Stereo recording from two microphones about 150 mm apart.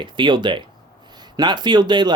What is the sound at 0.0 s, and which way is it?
Speech, 30° right (ahead or behind).